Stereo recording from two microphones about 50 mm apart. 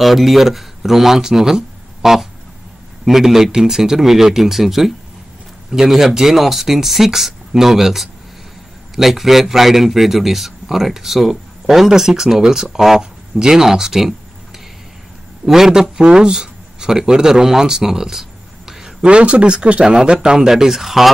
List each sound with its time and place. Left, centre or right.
0.0 s a man's voice: centre
15.4 s a man's voice: centre
18.7 s a sound: centre
19.0 s a man's voice: right; by 21.1 s centre